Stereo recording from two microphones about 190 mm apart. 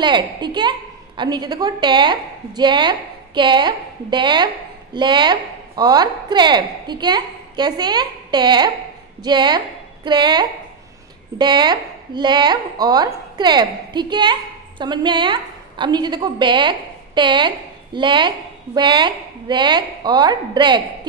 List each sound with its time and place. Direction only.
0.0 s a woman's voice: 25° right (ahead or behind)